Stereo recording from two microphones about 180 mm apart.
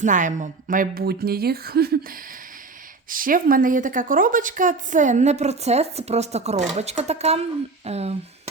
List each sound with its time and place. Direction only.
0.0 s a woman's voice: 45° right (ahead or behind)